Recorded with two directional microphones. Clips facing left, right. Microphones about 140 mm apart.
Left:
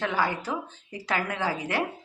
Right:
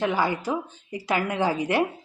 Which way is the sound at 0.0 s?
15° right (ahead or behind).